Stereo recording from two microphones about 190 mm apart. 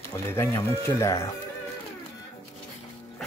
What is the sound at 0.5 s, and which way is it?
Speech, 15° left (ahead or behind).